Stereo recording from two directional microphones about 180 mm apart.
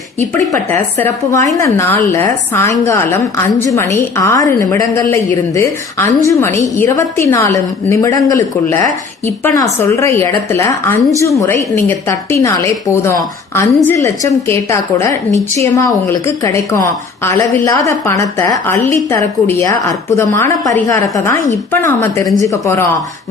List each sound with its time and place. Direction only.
0.5 s a woman's voice: 15° left (ahead or behind)